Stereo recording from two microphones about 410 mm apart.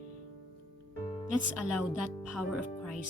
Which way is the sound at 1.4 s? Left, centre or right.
Centre.